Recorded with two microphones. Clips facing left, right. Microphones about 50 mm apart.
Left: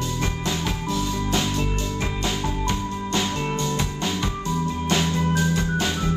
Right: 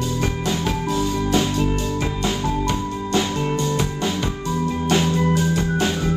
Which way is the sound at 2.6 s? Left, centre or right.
Right.